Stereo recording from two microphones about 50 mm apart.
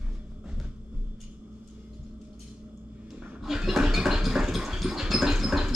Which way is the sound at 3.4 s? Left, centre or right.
Centre.